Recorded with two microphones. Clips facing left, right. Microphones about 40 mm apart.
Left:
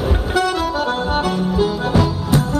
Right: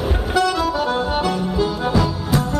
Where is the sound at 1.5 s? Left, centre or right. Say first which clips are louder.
Left 3 dB; left.